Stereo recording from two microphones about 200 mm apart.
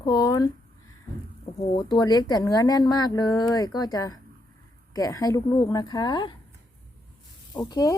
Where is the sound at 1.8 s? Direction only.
20° left (ahead or behind).